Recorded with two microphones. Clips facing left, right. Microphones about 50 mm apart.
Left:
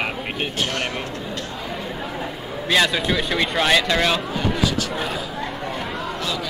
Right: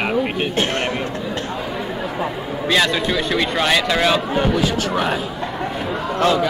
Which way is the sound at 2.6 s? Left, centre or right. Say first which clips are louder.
Right 1 dB; centre.